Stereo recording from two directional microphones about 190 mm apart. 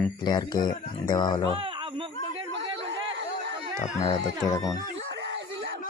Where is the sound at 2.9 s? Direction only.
65° right (ahead or behind).